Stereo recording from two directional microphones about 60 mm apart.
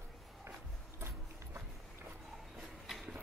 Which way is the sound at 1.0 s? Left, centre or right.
Right.